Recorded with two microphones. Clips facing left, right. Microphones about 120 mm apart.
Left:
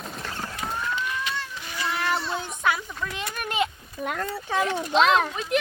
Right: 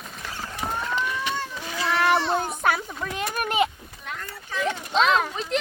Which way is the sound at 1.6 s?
80° right.